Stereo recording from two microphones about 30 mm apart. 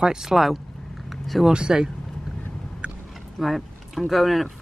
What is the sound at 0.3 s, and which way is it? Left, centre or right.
Speech, centre.